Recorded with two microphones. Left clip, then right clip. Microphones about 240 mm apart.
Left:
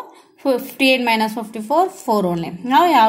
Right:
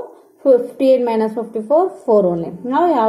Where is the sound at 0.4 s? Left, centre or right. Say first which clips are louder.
Right 5 dB; left.